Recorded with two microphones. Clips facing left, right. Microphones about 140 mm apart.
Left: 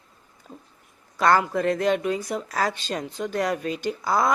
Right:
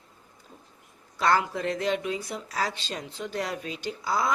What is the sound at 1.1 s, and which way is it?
Speech, 50° left (ahead or behind).